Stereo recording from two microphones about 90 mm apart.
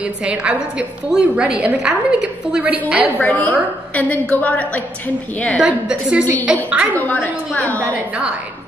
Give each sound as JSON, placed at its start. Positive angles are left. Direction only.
{"t": 0.0, "sound": "a woman's voice", "side_deg": -15}
{"t": 3.2, "sound": "a woman's voice", "side_deg": 15}
{"t": 5.6, "sound": "a woman's voice", "side_deg": -10}
{"t": 6.9, "sound": "a woman's voice", "side_deg": 20}
{"t": 7.9, "sound": "a woman's voice", "side_deg": -15}